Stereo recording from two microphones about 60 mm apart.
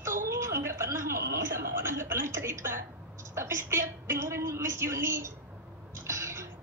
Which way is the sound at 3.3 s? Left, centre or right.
Right.